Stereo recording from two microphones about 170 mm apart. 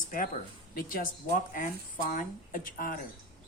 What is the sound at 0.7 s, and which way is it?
Speech, 55° left (ahead or behind).